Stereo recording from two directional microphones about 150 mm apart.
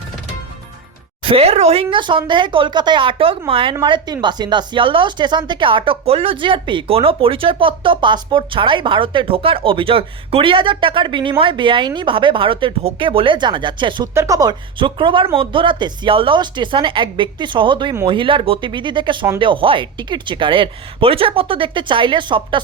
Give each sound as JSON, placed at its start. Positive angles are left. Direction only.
{"t": 1.2, "sound": "speech", "side_deg": -40}
{"t": 14.1, "sound": "speech", "side_deg": -20}